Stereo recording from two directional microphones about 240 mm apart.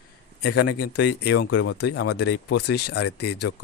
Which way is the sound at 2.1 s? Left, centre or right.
Left.